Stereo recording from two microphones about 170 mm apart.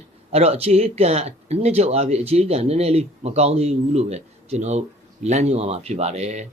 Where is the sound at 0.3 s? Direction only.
35° right (ahead or behind).